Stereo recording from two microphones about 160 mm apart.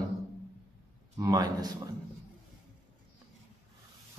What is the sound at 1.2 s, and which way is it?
Speech, 25° right (ahead or behind).